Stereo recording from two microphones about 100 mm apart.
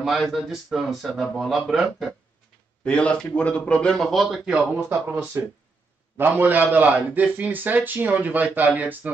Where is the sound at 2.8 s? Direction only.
10° left (ahead or behind).